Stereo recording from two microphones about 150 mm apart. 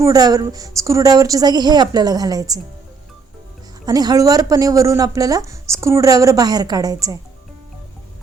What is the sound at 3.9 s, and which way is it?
Speech, 25° right (ahead or behind).